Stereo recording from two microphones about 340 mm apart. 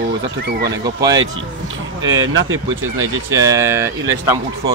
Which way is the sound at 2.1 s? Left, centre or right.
Right.